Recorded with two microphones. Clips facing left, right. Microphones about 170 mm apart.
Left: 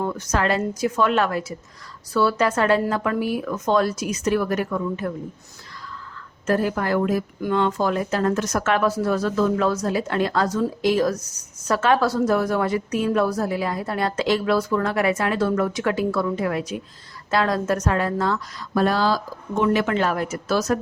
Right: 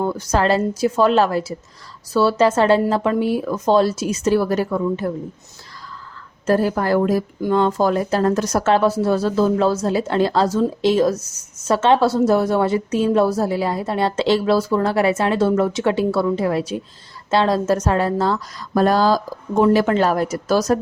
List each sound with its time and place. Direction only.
0.0 s a woman's voice: 30° right (ahead or behind)
6.4 s a woman's voice: 35° right (ahead or behind)